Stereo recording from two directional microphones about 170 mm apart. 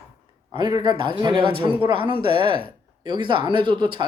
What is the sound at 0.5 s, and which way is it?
Speech, 25° right (ahead or behind).